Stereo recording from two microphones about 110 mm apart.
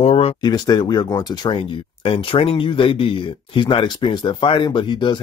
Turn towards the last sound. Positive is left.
turn(degrees=45)  # may be behind; listen again after turning